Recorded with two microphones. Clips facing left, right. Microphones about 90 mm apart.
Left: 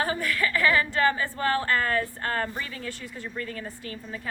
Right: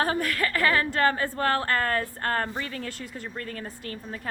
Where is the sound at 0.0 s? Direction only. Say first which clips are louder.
Right 1 dB; 60° right (ahead or behind).